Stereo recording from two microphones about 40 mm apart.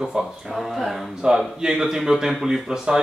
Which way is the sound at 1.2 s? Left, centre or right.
Centre.